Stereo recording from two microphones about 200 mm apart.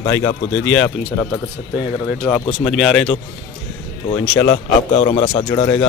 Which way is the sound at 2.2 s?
5° left (ahead or behind).